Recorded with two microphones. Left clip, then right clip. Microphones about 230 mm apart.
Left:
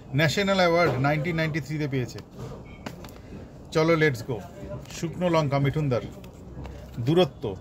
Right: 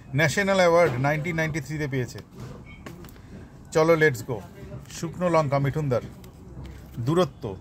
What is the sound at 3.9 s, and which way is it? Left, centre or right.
A man's voice, right.